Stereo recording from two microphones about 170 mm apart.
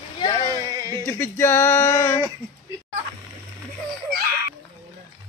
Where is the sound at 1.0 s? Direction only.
15° left (ahead or behind).